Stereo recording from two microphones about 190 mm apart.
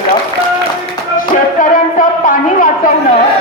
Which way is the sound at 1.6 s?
45° left (ahead or behind).